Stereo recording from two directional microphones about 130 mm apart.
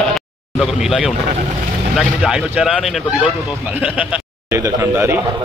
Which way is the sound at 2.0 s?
5° right (ahead or behind).